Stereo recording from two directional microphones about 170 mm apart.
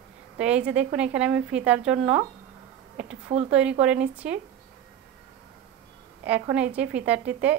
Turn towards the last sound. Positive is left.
turn(degrees=-10)  # may be behind; listen again after turning